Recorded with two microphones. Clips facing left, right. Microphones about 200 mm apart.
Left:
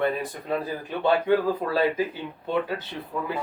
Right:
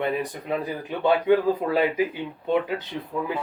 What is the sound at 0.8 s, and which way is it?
Speech, 15° right (ahead or behind).